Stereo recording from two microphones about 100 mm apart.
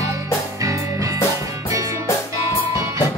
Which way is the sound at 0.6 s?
35° right (ahead or behind).